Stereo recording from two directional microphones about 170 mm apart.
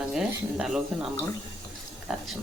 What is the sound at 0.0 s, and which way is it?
Speech, 5° right (ahead or behind).